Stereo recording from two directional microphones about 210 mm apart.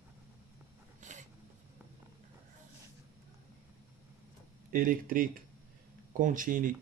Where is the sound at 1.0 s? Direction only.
35° right (ahead or behind).